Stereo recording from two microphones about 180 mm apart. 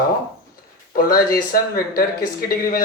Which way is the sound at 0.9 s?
55° left (ahead or behind).